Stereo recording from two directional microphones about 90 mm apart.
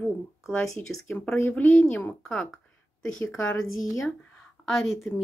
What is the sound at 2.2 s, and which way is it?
Speech, 5° left (ahead or behind).